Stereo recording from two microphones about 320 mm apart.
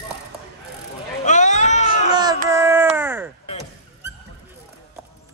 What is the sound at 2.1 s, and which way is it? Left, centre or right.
Child singing, centre.